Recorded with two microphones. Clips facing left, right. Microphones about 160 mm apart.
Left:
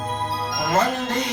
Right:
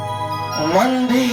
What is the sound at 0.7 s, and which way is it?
Music, 90° right.